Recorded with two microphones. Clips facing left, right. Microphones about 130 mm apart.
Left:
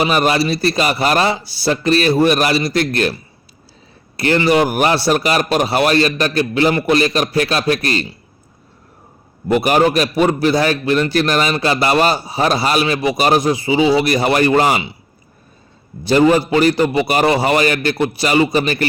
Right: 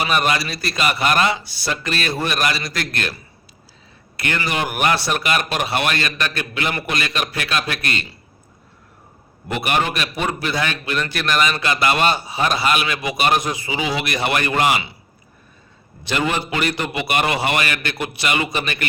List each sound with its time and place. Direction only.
0.0 s a man's voice: 35° left (ahead or behind)
4.2 s a man's voice: 30° left (ahead or behind)
9.5 s a man's voice: 35° left (ahead or behind)
16.0 s a man's voice: 35° left (ahead or behind)